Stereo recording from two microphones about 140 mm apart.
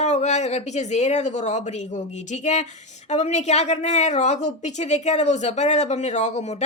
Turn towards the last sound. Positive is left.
turn(degrees=55)  # may be behind; listen again after turning